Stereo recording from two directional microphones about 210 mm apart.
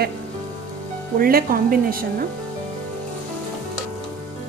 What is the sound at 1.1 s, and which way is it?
A woman's voice, 45° right (ahead or behind).